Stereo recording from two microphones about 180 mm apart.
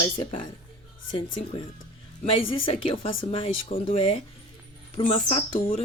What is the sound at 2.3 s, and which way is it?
Speech, 30° left (ahead or behind).